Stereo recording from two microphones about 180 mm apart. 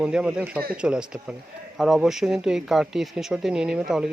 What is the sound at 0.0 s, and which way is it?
Speech, 5° right (ahead or behind).